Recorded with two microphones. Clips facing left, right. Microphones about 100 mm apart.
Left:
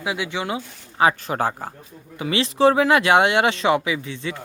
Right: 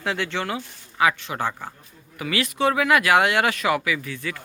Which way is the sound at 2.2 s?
25° left (ahead or behind).